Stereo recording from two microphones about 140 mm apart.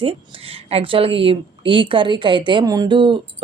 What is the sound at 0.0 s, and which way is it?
A woman's voice, 40° right (ahead or behind).